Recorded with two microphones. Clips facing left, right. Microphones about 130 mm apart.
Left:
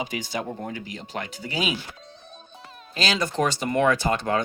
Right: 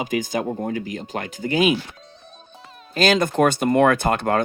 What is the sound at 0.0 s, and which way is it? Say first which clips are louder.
Speech: right 6 dB; 45° right (ahead or behind).